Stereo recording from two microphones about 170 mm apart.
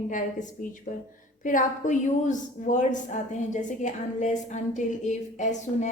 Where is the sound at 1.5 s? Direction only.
50° left (ahead or behind).